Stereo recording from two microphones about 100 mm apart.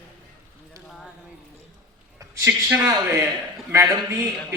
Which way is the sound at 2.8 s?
25° right (ahead or behind).